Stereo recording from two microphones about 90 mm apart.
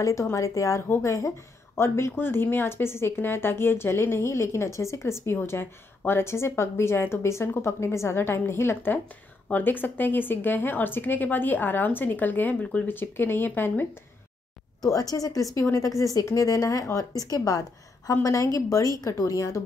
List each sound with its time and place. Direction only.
0.0 s a woman's voice: 35° left (ahead or behind)
14.8 s speech: 40° left (ahead or behind)